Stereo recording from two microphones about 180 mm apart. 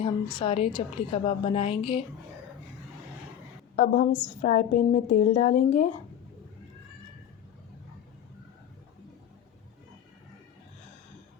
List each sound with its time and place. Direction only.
0.0 s a woman's voice: 25° left (ahead or behind)
3.8 s a woman's voice: 40° left (ahead or behind)